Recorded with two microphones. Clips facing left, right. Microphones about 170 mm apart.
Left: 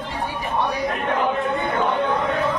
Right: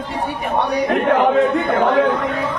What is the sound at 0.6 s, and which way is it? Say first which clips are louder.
A man's voice: right 8 dB; 75° right (ahead or behind).